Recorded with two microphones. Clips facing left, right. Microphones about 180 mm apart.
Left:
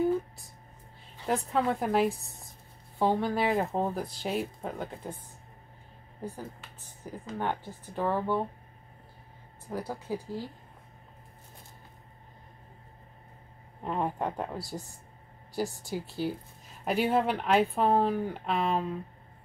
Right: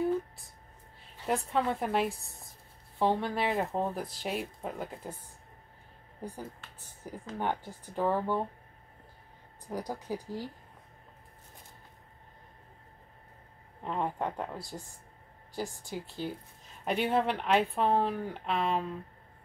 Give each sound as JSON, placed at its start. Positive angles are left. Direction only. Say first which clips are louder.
{"t": 1.2, "sound": "speech", "louder": "left 2 dB", "side_deg": 0}
{"t": 7.3, "sound": "speech", "louder": "even", "side_deg": -15}
{"t": 9.7, "sound": "speech", "louder": "left 1 dB", "side_deg": -15}
{"t": 13.8, "sound": "speech", "louder": "left 2 dB", "side_deg": 10}